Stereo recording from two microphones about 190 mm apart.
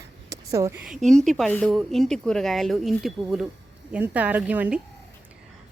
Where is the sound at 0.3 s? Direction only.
15° right (ahead or behind).